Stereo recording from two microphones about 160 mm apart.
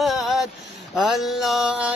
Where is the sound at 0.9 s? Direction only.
Centre (ahead or behind).